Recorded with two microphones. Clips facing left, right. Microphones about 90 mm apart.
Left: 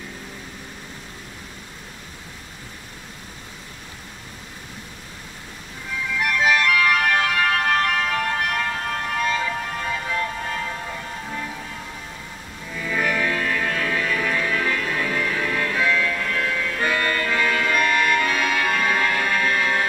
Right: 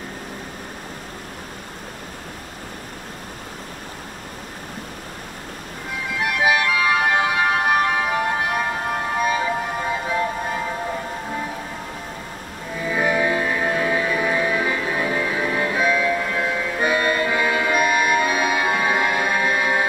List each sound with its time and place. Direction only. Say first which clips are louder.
6.0 s music: right 1 dB; 20° right (ahead or behind)
12.7 s music: right 3 dB; 20° right (ahead or behind)